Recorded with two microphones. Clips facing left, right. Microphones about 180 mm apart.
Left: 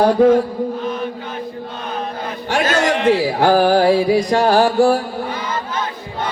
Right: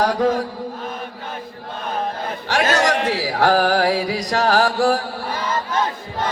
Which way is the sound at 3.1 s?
20° left (ahead or behind).